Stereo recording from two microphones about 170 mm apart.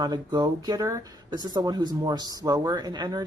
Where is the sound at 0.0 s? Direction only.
25° right (ahead or behind).